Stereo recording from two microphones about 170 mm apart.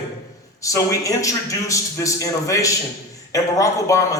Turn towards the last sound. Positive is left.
turn(degrees=20)  # may be behind; listen again after turning